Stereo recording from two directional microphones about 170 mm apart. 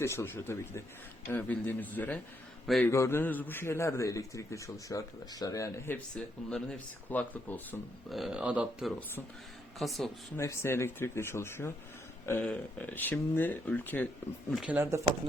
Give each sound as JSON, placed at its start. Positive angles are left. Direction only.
{"t": 0.0, "sound": "a man's voice", "side_deg": 15}
{"t": 8.1, "sound": "speech", "side_deg": 0}
{"t": 10.3, "sound": "a man's voice", "side_deg": 15}
{"t": 14.5, "sound": "speech", "side_deg": -5}